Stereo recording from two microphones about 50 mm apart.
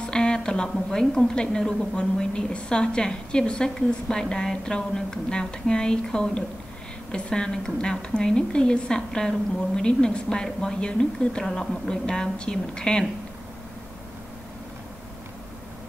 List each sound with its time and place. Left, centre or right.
0.0 s a woman's voice: centre